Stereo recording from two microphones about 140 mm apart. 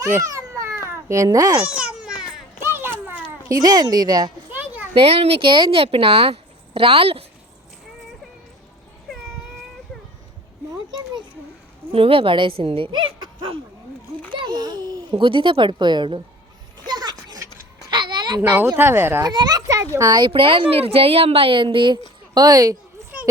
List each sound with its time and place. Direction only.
0.0 s babbling: 25° right (ahead or behind)
0.9 s a child's voice: 20° right (ahead or behind)
1.8 s children playing: 5° right (ahead or behind)
3.5 s a woman's voice: 25° right (ahead or behind)
4.5 s a sound: 15° right (ahead or behind)
4.9 s speech: 45° right (ahead or behind)
11.9 s a sound: 40° right (ahead or behind)
18.8 s speech: 15° right (ahead or behind)
19.2 s a child's voice: 30° right (ahead or behind)